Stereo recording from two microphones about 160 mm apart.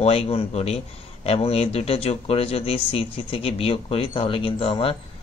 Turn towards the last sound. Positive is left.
turn(degrees=35)  # may be behind; listen again after turning